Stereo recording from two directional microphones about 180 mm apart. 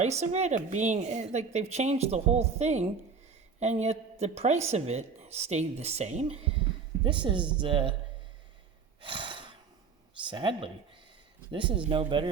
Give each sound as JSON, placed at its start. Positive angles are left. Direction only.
{"t": 0.0, "sound": "a woman's voice", "side_deg": -40}
{"t": 9.0, "sound": "gasp", "side_deg": -30}
{"t": 10.2, "sound": "speech", "side_deg": -30}